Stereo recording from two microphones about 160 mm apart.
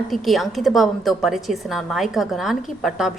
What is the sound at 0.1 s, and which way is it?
A woman's voice, centre (ahead or behind).